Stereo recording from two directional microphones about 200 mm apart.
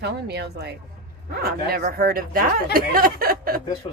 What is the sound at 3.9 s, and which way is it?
Speech, 25° left (ahead or behind).